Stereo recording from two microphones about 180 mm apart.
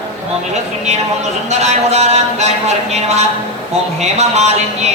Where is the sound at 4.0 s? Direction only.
35° right (ahead or behind).